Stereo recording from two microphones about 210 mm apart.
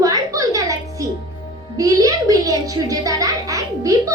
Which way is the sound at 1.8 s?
15° right (ahead or behind).